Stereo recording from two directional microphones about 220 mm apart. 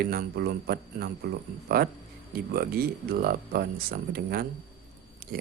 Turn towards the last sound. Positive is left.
turn(degrees=-45)  # may be behind; listen again after turning